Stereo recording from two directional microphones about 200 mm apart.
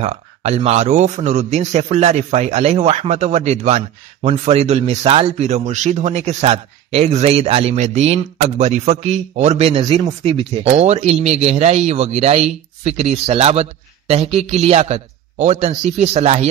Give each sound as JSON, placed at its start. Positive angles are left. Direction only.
{"t": 0.0, "sound": "a man's voice", "side_deg": -30}